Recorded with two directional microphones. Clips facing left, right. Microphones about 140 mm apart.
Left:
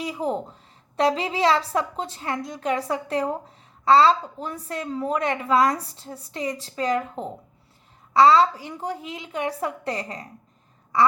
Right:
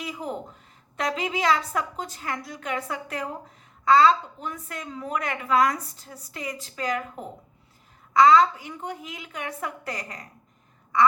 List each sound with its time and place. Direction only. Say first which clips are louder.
0.0 s a woman's voice: left 6 dB; 30° left (ahead or behind)